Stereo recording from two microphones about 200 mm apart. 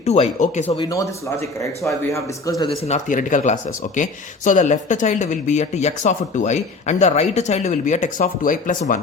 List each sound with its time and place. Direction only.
0.0 s speech: 35° left (ahead or behind)
0.6 s a man's voice: 15° left (ahead or behind)
2.1 s a man's voice: 15° left (ahead or behind)
2.6 s speech: 35° left (ahead or behind)